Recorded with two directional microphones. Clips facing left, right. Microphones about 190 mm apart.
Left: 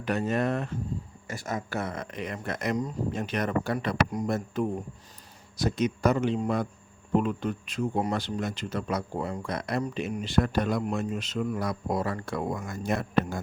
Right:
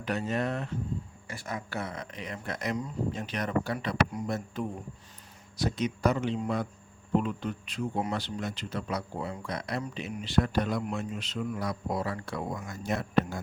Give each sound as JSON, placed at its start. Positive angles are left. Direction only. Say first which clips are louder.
{"t": 0.0, "sound": "speech", "louder": "left 3 dB", "side_deg": 50}